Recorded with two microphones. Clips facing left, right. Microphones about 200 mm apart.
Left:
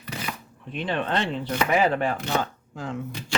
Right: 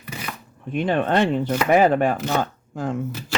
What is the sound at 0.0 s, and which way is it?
Shuffling cards, 10° right (ahead or behind).